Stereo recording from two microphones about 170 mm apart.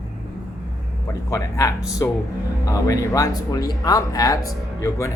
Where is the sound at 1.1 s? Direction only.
20° left (ahead or behind).